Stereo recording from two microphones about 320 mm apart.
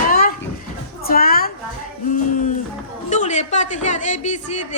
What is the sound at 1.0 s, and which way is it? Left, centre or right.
Speech, left.